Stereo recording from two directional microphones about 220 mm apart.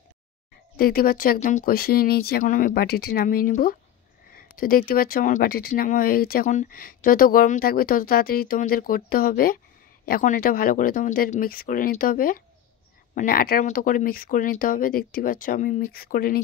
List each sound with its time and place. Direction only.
0.7 s speech: 40° left (ahead or behind)